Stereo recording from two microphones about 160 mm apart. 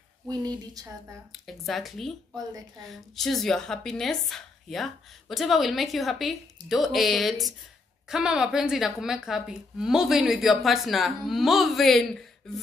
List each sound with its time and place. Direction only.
0.3 s speech: 25° right (ahead or behind)
1.3 s a woman's voice: centre (ahead or behind)